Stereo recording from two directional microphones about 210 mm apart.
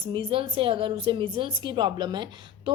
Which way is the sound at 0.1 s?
25° right (ahead or behind).